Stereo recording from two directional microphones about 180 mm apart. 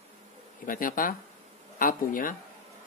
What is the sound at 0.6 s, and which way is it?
Speech, 50° left (ahead or behind).